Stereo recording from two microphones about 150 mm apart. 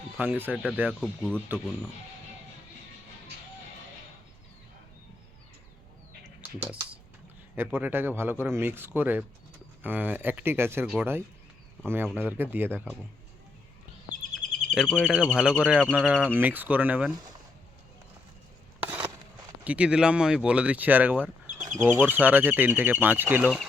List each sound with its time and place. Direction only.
0.2 s speech: 15° right (ahead or behind)
1.5 s speech: 10° left (ahead or behind)
7.5 s speech: 15° right (ahead or behind)
14.1 s chirp: 55° right (ahead or behind)
15.0 s speech: 5° right (ahead or behind)
18.8 s a sound: 10° right (ahead or behind)
19.6 s speech: 10° right (ahead or behind)